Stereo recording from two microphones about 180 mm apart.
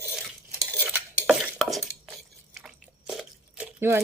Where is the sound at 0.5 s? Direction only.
20° right (ahead or behind).